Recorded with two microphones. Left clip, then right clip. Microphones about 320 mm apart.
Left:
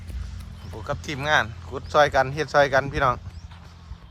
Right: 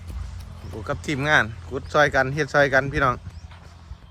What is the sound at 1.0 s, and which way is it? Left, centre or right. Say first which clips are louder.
Speech: right 2 dB; centre.